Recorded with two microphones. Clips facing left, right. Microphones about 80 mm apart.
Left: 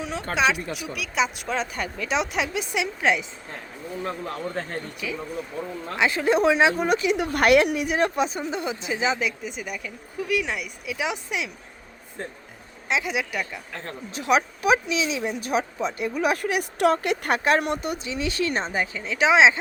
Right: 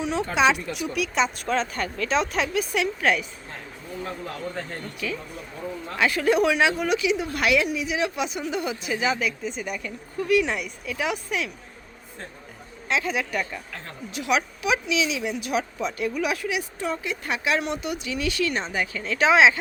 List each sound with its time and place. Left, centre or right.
0.0 s speech: centre
4.9 s speech: centre
6.0 s a woman's voice: left
7.2 s a woman's voice: left; by 9.5 s centre
9.5 s speech: centre
12.9 s speech: centre
14.1 s a woman's voice: left
16.2 s speech: left
16.7 s speech: left
18.1 s a woman's voice: left
18.9 s a woman's voice: centre